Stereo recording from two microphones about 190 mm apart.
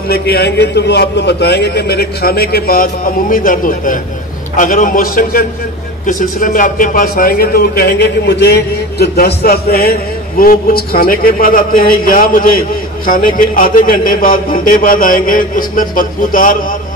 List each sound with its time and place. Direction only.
0.1 s a man's voice: 55° left (ahead or behind)